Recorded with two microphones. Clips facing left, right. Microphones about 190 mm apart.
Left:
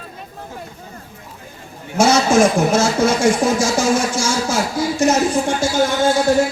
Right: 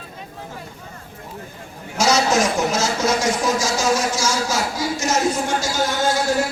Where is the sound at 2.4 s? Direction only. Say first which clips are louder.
Left 6 dB; 55° left (ahead or behind).